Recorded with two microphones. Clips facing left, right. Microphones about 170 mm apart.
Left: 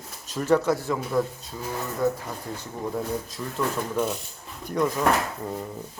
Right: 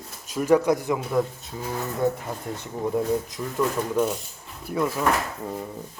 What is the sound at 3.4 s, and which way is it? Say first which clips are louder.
Speech: right 3 dB; 15° right (ahead or behind).